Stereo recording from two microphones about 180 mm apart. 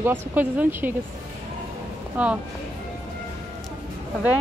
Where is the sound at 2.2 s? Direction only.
10° right (ahead or behind).